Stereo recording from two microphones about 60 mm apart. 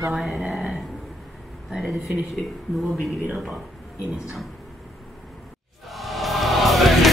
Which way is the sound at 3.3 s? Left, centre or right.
Centre.